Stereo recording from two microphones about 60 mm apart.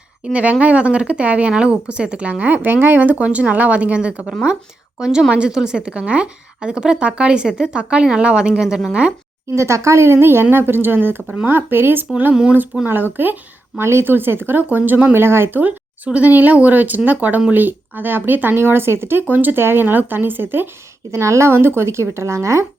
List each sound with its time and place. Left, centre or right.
0.2 s a woman's voice: right
9.6 s speech: right
12.3 s a woman's voice: centre
13.2 s speech: right
15.1 s speech: right
16.0 s speech: right
21.1 s speech: right